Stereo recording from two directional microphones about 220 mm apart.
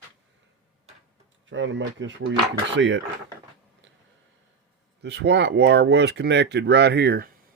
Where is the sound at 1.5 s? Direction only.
55° right (ahead or behind).